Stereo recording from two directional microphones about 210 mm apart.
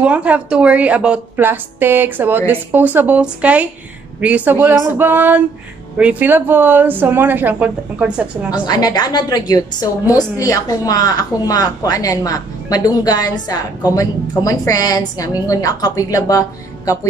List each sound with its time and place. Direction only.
0.0 s a woman's voice: 5° right (ahead or behind)
8.6 s a woman's voice: 20° left (ahead or behind)